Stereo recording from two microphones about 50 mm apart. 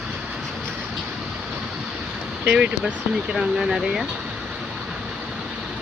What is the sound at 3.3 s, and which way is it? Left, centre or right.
Speech, centre.